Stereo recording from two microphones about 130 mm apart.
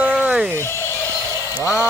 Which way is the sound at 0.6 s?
20° left (ahead or behind).